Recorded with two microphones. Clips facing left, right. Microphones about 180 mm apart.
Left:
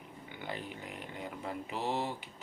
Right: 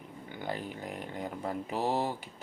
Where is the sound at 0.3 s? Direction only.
40° right (ahead or behind).